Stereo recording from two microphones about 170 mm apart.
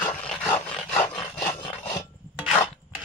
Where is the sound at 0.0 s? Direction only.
5° left (ahead or behind).